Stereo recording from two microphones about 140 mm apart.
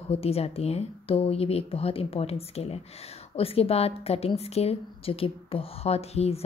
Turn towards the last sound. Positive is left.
turn(degrees=45)  # may be behind; listen again after turning